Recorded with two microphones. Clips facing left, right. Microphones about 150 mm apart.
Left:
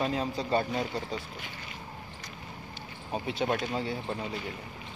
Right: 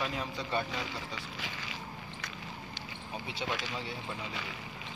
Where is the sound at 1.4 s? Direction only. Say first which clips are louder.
Right 1 dB; 90° right.